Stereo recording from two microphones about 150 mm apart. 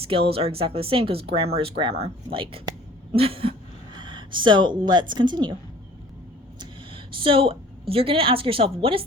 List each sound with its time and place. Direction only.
0.1 s speech: 40° right (ahead or behind)
6.6 s a woman's voice: 35° right (ahead or behind)